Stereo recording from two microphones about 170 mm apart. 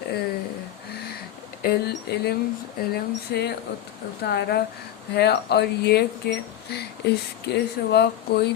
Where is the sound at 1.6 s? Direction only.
70° left (ahead or behind).